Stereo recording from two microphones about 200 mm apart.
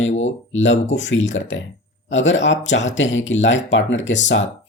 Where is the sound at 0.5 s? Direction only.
70° left (ahead or behind).